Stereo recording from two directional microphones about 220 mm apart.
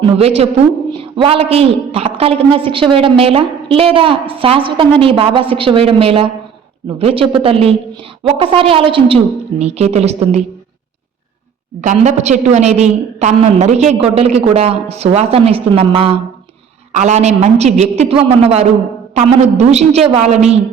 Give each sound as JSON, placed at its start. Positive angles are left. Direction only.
{"t": 0.0, "sound": "a woman's voice", "side_deg": -25}
{"t": 11.8, "sound": "a woman's voice", "side_deg": -30}